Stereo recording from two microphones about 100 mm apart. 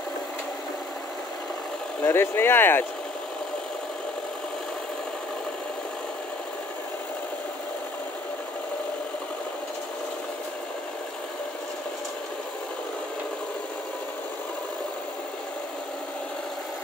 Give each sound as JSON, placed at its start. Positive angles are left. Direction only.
{"t": 2.0, "sound": "speech", "side_deg": 25}